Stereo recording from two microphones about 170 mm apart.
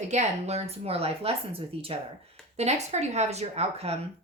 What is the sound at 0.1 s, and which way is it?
Speech, 40° right (ahead or behind).